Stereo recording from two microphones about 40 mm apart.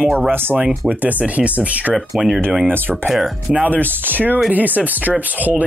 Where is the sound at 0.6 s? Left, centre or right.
Right.